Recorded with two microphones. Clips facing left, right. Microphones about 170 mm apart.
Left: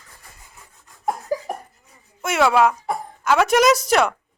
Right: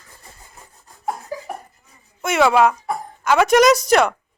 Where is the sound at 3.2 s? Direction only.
Centre (ahead or behind).